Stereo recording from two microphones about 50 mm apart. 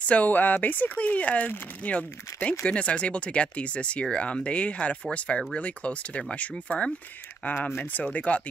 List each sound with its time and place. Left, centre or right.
0.0 s speech: left